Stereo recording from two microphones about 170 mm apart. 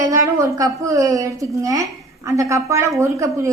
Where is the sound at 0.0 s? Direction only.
20° right (ahead or behind).